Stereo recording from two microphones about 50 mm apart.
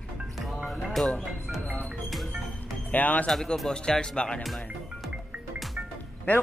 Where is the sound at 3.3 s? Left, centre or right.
Centre.